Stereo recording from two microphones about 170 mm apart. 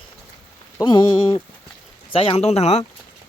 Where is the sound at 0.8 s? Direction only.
25° left (ahead or behind).